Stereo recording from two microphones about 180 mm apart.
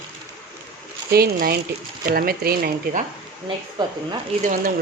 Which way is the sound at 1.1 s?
60° right (ahead or behind).